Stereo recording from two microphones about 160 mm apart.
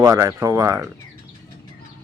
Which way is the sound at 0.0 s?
20° right (ahead or behind).